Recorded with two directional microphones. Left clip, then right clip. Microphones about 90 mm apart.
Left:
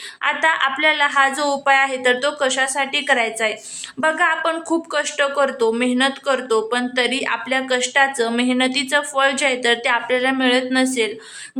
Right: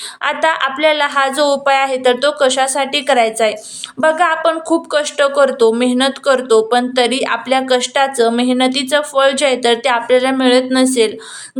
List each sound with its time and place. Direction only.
0.4 s a woman's voice: 25° right (ahead or behind)